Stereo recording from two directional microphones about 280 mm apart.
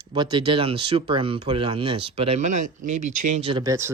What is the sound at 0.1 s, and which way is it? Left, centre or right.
Speech, centre.